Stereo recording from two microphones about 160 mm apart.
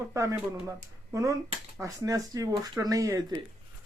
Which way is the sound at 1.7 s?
20° right (ahead or behind).